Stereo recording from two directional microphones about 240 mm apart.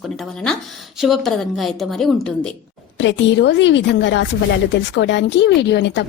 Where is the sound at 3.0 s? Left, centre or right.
Left.